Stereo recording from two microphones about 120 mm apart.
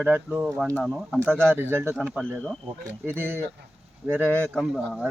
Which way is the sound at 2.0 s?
10° left (ahead or behind).